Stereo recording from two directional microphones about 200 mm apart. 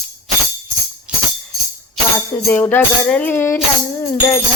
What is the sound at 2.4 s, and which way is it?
Music, 10° left (ahead or behind).